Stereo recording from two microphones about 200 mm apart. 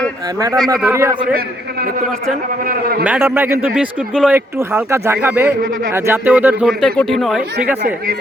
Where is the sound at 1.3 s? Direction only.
50° right (ahead or behind).